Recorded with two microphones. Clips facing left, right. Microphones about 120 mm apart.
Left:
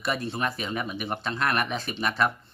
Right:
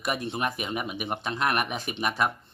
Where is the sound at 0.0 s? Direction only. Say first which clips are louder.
Even; 15° right (ahead or behind).